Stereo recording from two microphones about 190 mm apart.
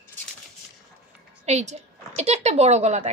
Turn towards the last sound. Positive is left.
turn(degrees=-35)  # may be behind; listen again after turning